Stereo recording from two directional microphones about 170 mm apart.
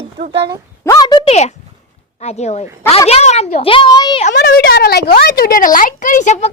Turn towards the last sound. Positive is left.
turn(degrees=40)  # may be behind; listen again after turning